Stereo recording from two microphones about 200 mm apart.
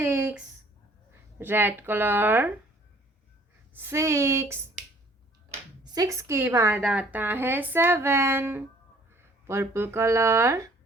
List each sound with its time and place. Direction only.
0.0 s a sound: 10° right (ahead or behind)
1.4 s a woman's voice: 10° right (ahead or behind)
3.8 s a woman's voice: 15° right (ahead or behind)
5.9 s a woman's voice: 15° right (ahead or behind)